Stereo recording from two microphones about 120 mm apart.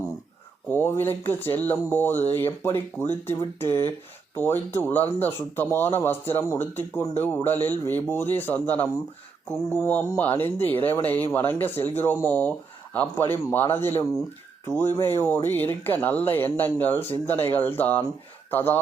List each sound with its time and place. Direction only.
0.7 s speech: 20° left (ahead or behind)